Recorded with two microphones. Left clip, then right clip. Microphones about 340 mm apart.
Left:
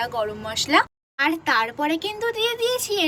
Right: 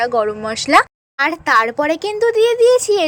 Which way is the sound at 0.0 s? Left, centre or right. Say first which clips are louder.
Right 9 dB; centre.